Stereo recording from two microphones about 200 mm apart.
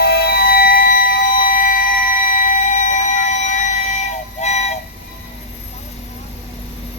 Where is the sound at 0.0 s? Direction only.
50° left (ahead or behind); by 4.7 s 35° left (ahead or behind).